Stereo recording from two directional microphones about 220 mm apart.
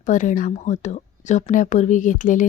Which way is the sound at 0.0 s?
35° left (ahead or behind).